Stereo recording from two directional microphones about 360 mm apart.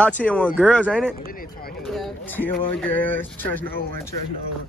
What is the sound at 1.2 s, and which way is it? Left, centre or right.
Speech, left.